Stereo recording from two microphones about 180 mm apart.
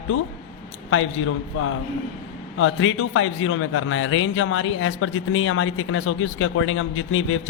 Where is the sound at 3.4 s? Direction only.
90° left.